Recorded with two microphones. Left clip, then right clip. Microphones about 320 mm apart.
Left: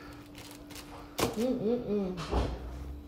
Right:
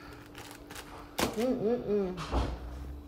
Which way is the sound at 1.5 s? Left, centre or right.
Right.